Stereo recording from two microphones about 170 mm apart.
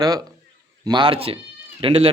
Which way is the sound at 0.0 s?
20° right (ahead or behind).